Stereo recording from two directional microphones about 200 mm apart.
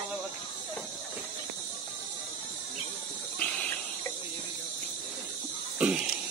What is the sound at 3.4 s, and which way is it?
Hiss, 5° left (ahead or behind).